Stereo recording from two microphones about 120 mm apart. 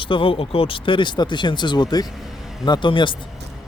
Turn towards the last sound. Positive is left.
turn(degrees=45)  # may be behind; listen again after turning